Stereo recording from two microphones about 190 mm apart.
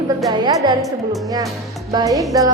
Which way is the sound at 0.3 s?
20° right (ahead or behind).